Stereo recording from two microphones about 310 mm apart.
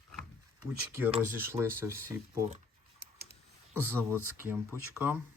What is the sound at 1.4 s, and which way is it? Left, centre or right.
Speech, centre.